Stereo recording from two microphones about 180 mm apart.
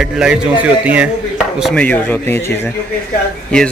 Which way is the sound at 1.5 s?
5° left (ahead or behind).